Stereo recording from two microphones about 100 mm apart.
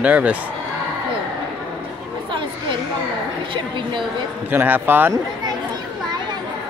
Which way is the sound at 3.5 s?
55° right (ahead or behind).